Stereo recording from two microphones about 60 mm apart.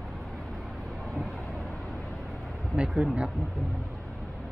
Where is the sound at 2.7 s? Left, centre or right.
Centre.